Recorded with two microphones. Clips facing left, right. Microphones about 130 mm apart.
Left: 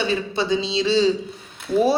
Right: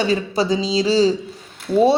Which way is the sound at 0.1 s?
40° right (ahead or behind).